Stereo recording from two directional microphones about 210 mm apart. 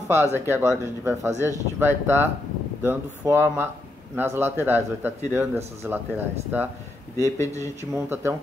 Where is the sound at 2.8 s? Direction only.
10° right (ahead or behind).